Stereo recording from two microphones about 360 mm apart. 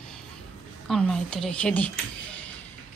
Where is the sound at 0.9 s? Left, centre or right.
Centre.